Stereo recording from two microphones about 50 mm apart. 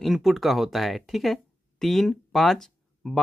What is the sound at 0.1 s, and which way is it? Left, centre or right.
Speech, centre.